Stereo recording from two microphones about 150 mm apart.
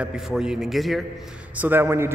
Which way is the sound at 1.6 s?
15° right (ahead or behind).